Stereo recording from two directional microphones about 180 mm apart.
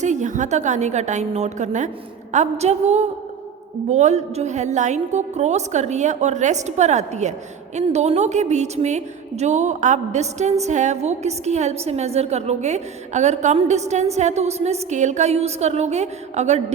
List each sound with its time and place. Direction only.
0.0 s a woman's voice: 40° right (ahead or behind)